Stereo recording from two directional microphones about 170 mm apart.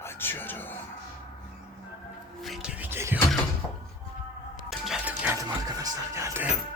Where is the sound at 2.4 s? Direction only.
Centre (ahead or behind).